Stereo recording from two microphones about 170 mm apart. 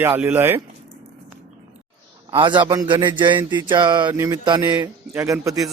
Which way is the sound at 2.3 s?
25° right (ahead or behind).